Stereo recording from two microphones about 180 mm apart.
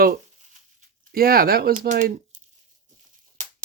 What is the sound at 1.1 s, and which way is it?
Speech, 55° right (ahead or behind).